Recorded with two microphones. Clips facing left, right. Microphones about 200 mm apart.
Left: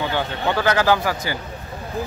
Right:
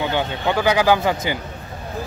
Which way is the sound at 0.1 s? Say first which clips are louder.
Right 1 dB; 15° right (ahead or behind).